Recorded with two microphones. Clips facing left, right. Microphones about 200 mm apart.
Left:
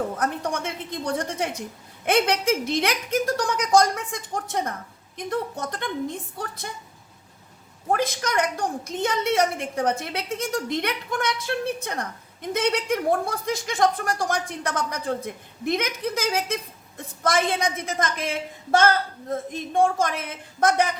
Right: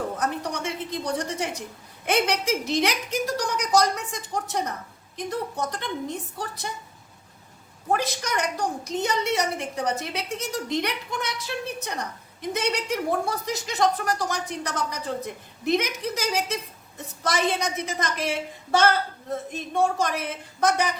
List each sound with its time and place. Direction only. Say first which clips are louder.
0.2 s a sound: left 2 dB; 50° left (ahead or behind)
2.0 s a woman's voice: left 3 dB; 55° left (ahead or behind)
7.9 s a woman's voice: left 2 dB; 50° left (ahead or behind)